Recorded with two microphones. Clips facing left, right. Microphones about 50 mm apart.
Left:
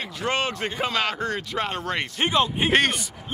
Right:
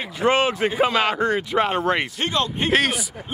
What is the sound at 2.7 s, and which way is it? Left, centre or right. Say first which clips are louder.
Speech: right 3 dB; centre.